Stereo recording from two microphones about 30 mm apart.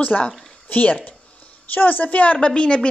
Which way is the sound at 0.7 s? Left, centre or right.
Left.